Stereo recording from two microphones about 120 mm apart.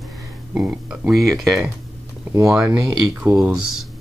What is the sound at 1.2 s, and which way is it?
Speech, 25° right (ahead or behind).